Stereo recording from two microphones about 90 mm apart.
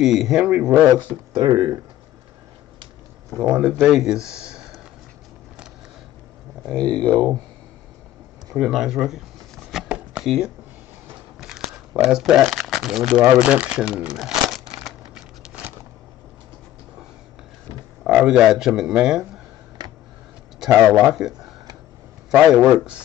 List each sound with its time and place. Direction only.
0.0 s a man's voice: 5° right (ahead or behind)
1.4 s speech: 45° right (ahead or behind)
3.3 s a man's voice: 15° right (ahead or behind)
6.8 s speech: 50° right (ahead or behind)
8.5 s speech: 5° right (ahead or behind)
9.7 s a sound: 5° right (ahead or behind)
10.2 s speech: centre (ahead or behind)
11.3 s a sound: 5° right (ahead or behind)
13.4 s a man's voice: 15° right (ahead or behind)
13.9 s crumpling: 5° right (ahead or behind)
15.4 s a sound: 15° right (ahead or behind)
18.0 s speech: 10° right (ahead or behind)
19.8 s a sound: 50° right (ahead or behind)
20.7 s a man's voice: 10° right (ahead or behind)